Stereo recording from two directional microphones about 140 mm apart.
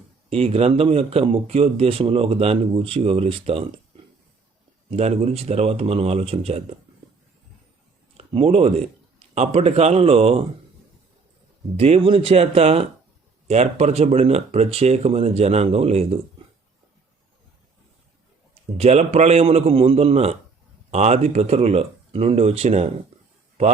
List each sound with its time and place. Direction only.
0.3 s speech: 45° right (ahead or behind)
4.9 s speech: 50° right (ahead or behind)
8.1 s speech: 40° right (ahead or behind)
11.8 s speech: 40° right (ahead or behind)
18.5 s speech: 50° right (ahead or behind)